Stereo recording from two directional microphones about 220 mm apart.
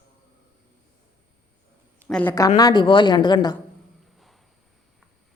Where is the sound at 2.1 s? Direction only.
10° left (ahead or behind).